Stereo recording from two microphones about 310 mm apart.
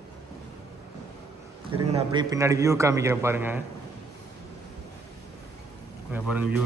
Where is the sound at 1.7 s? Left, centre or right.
Right.